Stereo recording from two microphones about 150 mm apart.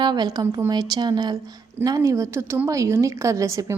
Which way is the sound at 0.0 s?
30° right (ahead or behind).